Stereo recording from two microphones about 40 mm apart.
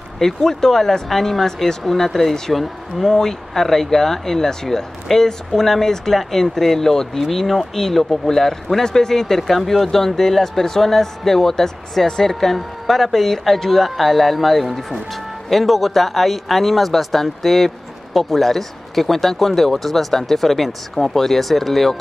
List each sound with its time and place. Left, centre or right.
0.2 s speech: centre